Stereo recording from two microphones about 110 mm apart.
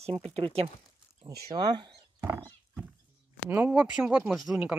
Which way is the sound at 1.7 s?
40° right (ahead or behind).